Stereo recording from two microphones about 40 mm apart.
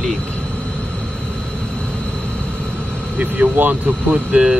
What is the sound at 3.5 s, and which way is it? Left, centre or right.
Speech, right.